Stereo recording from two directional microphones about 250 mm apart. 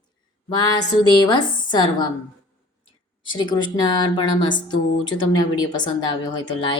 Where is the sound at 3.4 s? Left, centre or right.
Centre.